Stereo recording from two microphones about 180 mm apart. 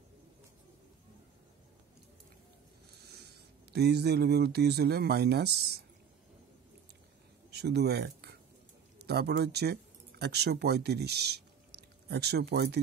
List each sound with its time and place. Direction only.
3.0 s speech: 65° right (ahead or behind)
7.5 s speech: 65° right (ahead or behind)